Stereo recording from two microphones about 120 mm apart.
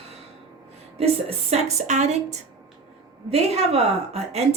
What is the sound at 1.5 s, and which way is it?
Speech, 65° right (ahead or behind).